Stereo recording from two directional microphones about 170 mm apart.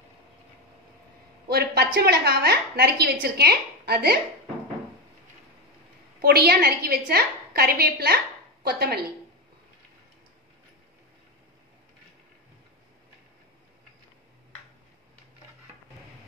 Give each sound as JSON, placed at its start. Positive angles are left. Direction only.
{"t": 1.5, "sound": "a sound", "side_deg": -70}
{"t": 2.0, "sound": "a woman's voice", "side_deg": -65}
{"t": 6.2, "sound": "a woman's voice", "side_deg": -65}